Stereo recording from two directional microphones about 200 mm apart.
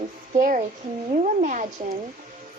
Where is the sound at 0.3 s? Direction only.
40° right (ahead or behind).